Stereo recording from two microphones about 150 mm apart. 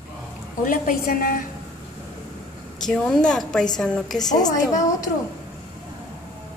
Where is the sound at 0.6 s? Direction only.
70° left (ahead or behind).